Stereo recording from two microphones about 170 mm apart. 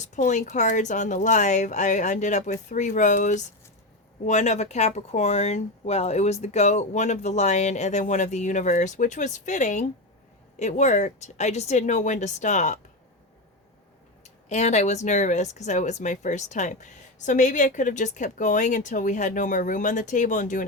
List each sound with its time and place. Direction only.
0.0 s speech: 45° left (ahead or behind)
14.5 s speech: 40° left (ahead or behind)